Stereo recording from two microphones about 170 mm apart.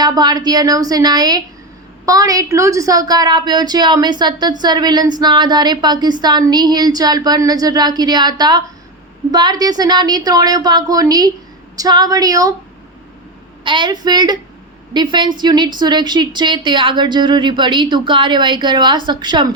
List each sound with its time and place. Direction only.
0.0 s a woman's voice: 25° right (ahead or behind)
13.7 s a woman's voice: 25° right (ahead or behind)